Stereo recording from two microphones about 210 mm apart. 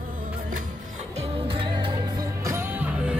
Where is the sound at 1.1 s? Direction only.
25° right (ahead or behind).